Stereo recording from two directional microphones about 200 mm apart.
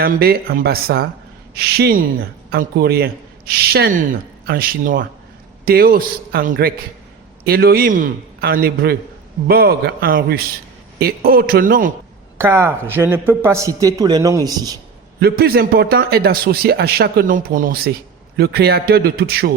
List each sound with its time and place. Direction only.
0.0 s a man's voice: 50° right (ahead or behind)
12.4 s a man's voice: 15° right (ahead or behind)
15.2 s a man's voice: 50° right (ahead or behind)